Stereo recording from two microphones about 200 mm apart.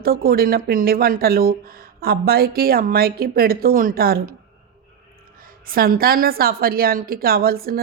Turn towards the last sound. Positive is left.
turn(degrees=-50)  # may be behind; listen again after turning